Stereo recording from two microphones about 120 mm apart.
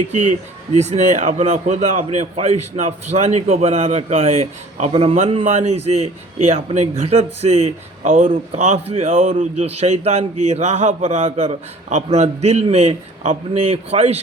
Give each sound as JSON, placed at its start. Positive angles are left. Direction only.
{"t": 0.1, "sound": "a man's voice", "side_deg": -75}
{"t": 5.5, "sound": "a man's voice", "side_deg": -65}
{"t": 8.5, "sound": "a man's voice", "side_deg": -65}
{"t": 9.4, "sound": "a man's voice", "side_deg": -65}